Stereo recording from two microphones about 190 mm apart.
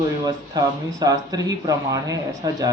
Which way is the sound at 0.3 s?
20° right (ahead or behind).